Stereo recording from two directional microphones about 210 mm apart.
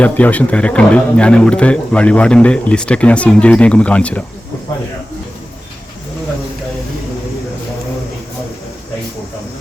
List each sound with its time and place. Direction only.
0.0 s speech: 5° left (ahead or behind)